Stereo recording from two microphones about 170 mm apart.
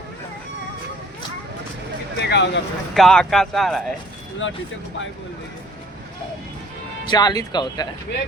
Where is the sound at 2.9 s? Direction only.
Centre (ahead or behind).